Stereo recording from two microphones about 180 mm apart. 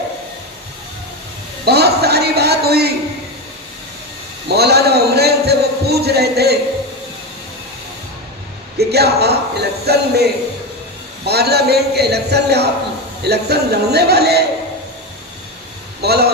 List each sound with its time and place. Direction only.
1.6 s speech: 65° right (ahead or behind)
4.5 s a sound: 65° right (ahead or behind)
8.7 s speech: 65° right (ahead or behind)
11.2 s speech: 65° right (ahead or behind)
16.0 s speech: 65° right (ahead or behind)